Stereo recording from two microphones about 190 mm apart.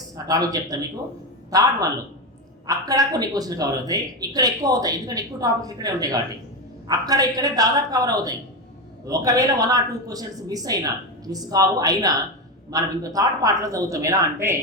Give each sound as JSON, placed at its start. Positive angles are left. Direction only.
{"t": 0.3, "sound": "speech", "side_deg": -20}